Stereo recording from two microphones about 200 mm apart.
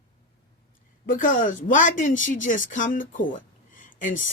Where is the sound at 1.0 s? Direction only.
40° left (ahead or behind).